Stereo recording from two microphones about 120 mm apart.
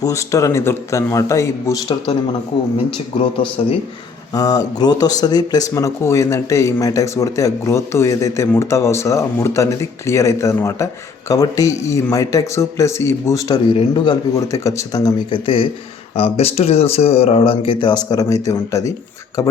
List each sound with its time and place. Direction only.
0.0 s speech: 25° left (ahead or behind)
4.4 s speech: 30° left (ahead or behind)
13.7 s speech: 40° left (ahead or behind)
14.5 s speech: 25° left (ahead or behind)
15.3 s speech: 45° left (ahead or behind); by 18.9 s 30° left (ahead or behind)